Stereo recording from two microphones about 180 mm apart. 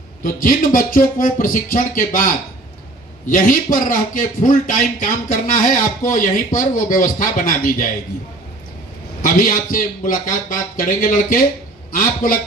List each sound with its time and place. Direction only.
0.2 s a man's voice: 50° left (ahead or behind)
9.2 s a man's voice: 50° left (ahead or behind)